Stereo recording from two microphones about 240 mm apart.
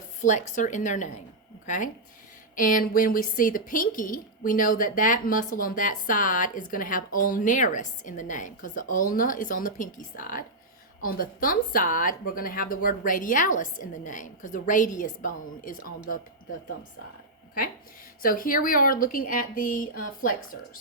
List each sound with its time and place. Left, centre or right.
0.2 s speech: left
18.2 s speech: left